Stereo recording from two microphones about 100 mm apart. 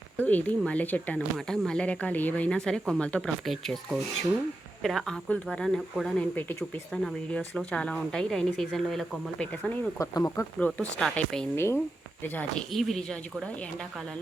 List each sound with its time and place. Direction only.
0.2 s speech: 15° left (ahead or behind)
9.6 s speech: 15° left (ahead or behind)
10.0 s speech: 30° left (ahead or behind)
10.8 s speech: 10° left (ahead or behind)
11.5 s speech: 25° left (ahead or behind)
12.5 s speech: 5° left (ahead or behind)